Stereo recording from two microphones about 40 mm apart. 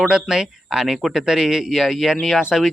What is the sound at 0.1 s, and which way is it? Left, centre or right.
A man's voice, centre.